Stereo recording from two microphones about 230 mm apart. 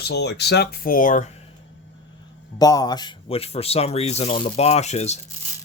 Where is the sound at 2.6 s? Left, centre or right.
Centre.